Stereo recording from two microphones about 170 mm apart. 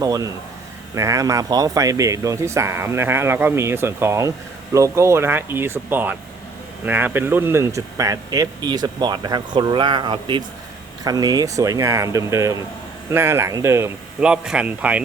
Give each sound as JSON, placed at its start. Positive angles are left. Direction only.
{"t": 0.0, "sound": "speech", "side_deg": -20}